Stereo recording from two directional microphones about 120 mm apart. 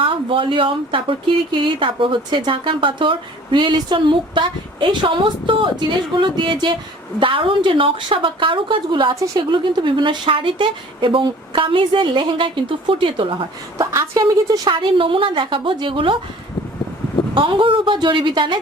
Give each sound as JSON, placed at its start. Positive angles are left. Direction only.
{"t": 0.0, "sound": "a woman's voice", "side_deg": -45}
{"t": 13.7, "sound": "speech", "side_deg": -25}
{"t": 17.3, "sound": "a woman's voice", "side_deg": -45}